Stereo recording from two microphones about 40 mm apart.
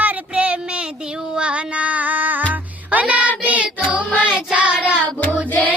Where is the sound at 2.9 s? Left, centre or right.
Right.